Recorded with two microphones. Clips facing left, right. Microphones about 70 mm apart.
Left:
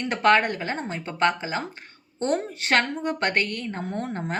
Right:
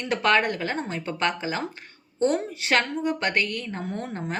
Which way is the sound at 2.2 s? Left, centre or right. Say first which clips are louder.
Right 2 dB; left.